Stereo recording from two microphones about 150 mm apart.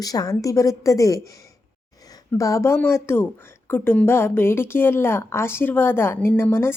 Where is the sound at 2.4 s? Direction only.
20° left (ahead or behind).